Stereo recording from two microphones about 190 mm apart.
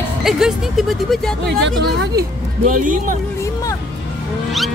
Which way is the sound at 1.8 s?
60° right (ahead or behind).